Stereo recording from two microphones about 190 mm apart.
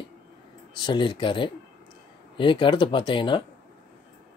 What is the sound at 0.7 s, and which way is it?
Speech, 25° left (ahead or behind).